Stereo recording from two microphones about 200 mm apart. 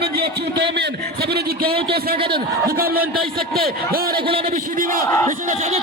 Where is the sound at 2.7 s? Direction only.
50° right (ahead or behind).